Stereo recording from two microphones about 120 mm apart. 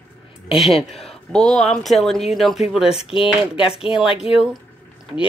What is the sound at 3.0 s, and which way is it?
Speech, 50° left (ahead or behind).